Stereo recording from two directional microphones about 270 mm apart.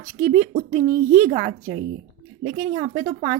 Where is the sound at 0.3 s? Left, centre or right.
Right.